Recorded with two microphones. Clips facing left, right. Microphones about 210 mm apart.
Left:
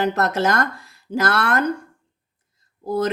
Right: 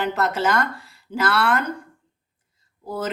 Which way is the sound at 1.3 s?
45° left (ahead or behind).